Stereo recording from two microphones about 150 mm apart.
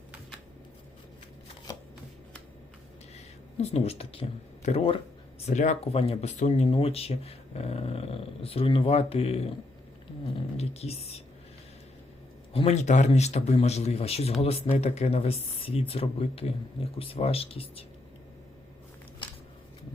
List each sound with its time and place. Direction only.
3.6 s a man's voice: 45° left (ahead or behind)
5.5 s speech: 50° left (ahead or behind)
12.5 s a man's voice: 45° left (ahead or behind)